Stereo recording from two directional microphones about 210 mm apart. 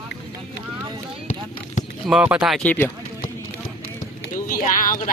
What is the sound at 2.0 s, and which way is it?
Speech, 5° right (ahead or behind).